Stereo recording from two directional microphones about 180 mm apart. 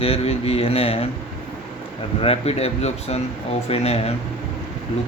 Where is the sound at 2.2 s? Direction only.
35° left (ahead or behind).